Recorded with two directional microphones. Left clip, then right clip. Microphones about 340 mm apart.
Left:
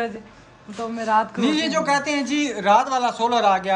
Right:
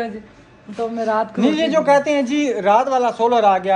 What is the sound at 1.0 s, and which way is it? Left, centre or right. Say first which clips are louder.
A man's voice: right 1 dB; centre.